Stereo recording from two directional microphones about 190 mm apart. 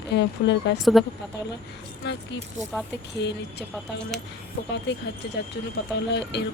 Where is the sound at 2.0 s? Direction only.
60° left (ahead or behind).